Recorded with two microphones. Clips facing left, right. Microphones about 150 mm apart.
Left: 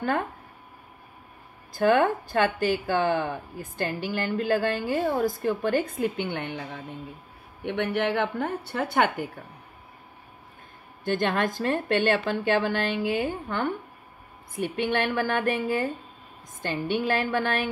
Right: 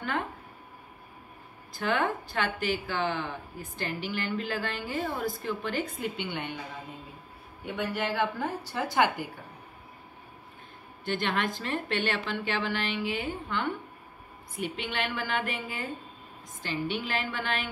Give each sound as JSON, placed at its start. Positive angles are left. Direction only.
{"t": 1.7, "sound": "speech", "side_deg": 50}
{"t": 7.6, "sound": "a woman's voice", "side_deg": 65}
{"t": 11.1, "sound": "speech", "side_deg": 45}